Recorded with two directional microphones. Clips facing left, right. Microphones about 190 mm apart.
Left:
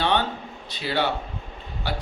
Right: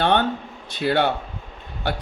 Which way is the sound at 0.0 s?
55° right (ahead or behind).